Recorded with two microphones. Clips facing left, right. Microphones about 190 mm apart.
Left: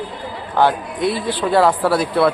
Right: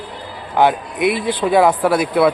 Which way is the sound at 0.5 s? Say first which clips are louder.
Right 2 dB; 15° right (ahead or behind).